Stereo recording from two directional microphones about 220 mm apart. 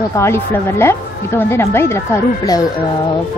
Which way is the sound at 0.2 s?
10° left (ahead or behind).